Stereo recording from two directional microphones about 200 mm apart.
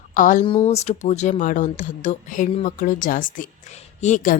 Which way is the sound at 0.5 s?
35° left (ahead or behind).